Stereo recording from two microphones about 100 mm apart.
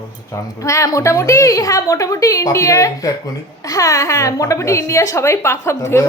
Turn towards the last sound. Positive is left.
turn(degrees=25)  # may be behind; listen again after turning